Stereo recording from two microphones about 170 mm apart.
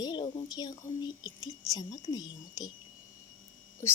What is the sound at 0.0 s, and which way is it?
A woman's voice, 25° left (ahead or behind).